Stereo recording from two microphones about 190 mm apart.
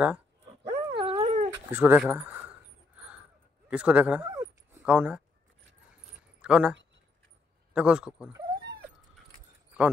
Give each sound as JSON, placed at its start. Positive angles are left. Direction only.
{"t": 0.7, "sound": "dog", "side_deg": -30}
{"t": 1.5, "sound": "speech", "side_deg": -10}
{"t": 3.7, "sound": "speech", "side_deg": -5}
{"t": 6.4, "sound": "speech", "side_deg": -5}
{"t": 7.7, "sound": "a man's voice", "side_deg": -5}